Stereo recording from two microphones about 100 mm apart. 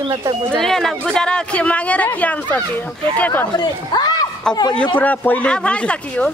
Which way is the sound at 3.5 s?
45° left (ahead or behind).